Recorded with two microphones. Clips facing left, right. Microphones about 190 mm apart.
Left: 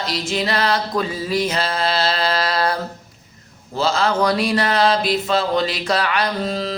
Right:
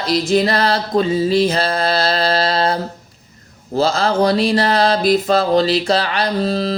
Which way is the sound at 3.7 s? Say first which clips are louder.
Right 3 dB; 40° right (ahead or behind).